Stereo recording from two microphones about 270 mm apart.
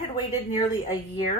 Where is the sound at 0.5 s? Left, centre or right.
Centre.